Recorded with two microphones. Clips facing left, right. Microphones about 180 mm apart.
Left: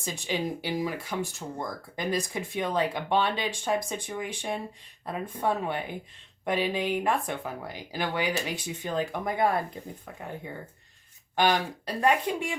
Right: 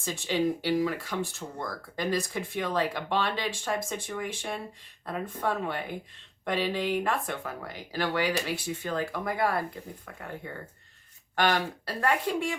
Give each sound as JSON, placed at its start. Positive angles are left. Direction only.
{"t": 0.0, "sound": "speech", "side_deg": 15}
{"t": 11.3, "sound": "speech", "side_deg": 15}